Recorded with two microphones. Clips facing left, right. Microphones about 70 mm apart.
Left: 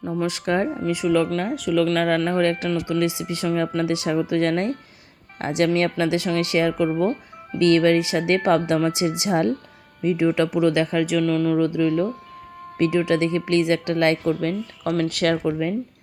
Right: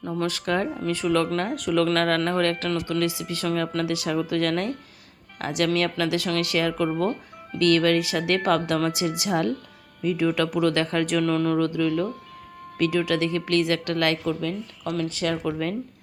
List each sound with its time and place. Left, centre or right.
0.0 s speech: centre
0.3 s speech: left
0.8 s speech: centre
11.0 s speech: centre
11.6 s speech: left
14.4 s speech: left
15.4 s speech: centre